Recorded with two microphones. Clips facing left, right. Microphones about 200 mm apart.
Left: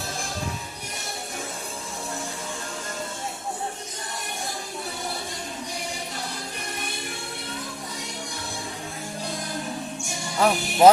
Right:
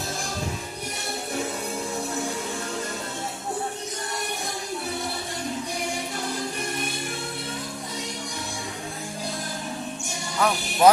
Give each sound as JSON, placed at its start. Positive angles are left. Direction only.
{"t": 10.4, "sound": "speech", "side_deg": 25}